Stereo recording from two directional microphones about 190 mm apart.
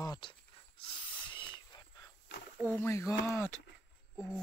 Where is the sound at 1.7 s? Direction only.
20° left (ahead or behind).